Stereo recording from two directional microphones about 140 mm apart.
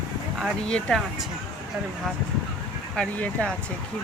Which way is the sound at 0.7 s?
5° left (ahead or behind).